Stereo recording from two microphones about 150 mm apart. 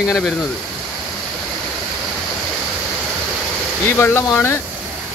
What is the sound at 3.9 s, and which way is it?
Speech, 15° left (ahead or behind).